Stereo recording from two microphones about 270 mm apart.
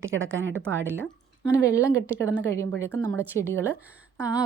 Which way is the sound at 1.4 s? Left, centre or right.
Centre.